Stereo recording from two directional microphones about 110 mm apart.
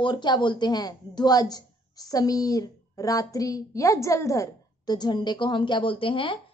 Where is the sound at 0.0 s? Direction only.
40° left (ahead or behind).